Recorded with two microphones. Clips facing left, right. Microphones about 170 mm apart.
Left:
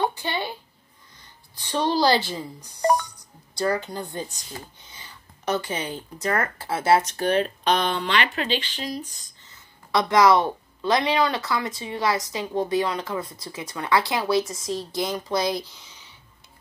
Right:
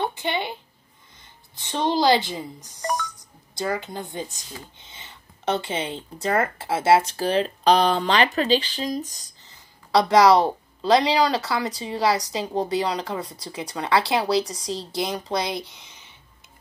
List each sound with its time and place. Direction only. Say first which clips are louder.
0.1 s a sound: right 2 dB; 20° right (ahead or behind)
1.5 s a woman's voice: even; 20° right (ahead or behind)
15.6 s speech: right 3 dB; 60° right (ahead or behind)